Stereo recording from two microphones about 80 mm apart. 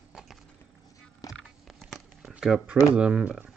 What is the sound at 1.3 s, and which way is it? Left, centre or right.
Biting, centre.